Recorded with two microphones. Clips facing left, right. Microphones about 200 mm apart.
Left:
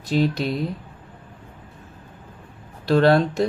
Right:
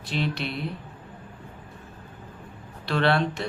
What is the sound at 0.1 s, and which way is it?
Speech, 40° left (ahead or behind).